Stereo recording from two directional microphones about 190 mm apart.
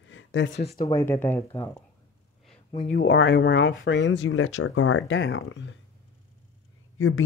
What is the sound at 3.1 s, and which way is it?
Speech, 85° left.